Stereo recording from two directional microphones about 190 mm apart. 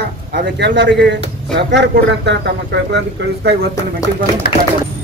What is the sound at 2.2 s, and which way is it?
Speech, 65° right (ahead or behind).